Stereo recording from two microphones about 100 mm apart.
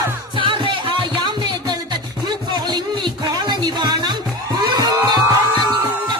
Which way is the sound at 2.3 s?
45° right (ahead or behind).